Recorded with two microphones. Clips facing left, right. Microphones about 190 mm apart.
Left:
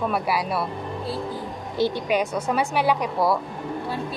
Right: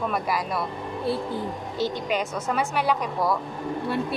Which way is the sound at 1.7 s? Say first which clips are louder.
Left 4 dB; 10° left (ahead or behind).